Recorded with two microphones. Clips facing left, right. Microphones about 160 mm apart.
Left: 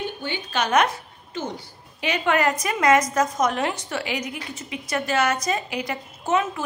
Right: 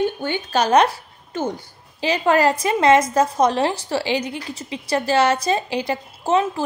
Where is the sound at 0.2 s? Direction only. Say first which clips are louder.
Right 6 dB; 45° right (ahead or behind).